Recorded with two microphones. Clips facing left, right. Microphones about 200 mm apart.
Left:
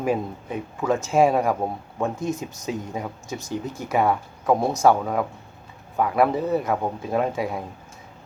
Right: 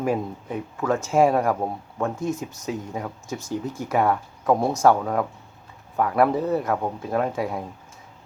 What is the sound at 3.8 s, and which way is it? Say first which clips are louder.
Speech: left 1 dB; 10° left (ahead or behind).